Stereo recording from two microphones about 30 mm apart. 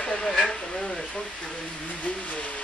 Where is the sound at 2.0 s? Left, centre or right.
Left.